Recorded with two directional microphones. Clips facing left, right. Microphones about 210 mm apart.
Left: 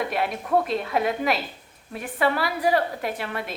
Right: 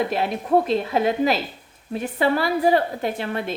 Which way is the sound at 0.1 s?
30° right (ahead or behind).